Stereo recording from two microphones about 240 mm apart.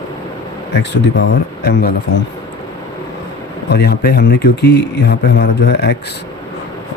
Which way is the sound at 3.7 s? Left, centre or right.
Left.